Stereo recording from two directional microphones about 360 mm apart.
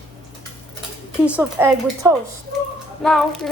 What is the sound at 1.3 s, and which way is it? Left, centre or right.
A woman's voice, centre.